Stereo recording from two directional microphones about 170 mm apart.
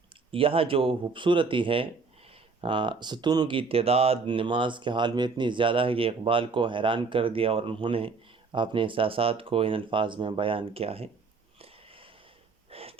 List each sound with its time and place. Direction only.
0.3 s speech: 35° right (ahead or behind)
12.7 s wheeze: 35° right (ahead or behind)